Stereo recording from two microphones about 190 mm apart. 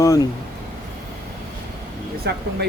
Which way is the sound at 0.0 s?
20° left (ahead or behind).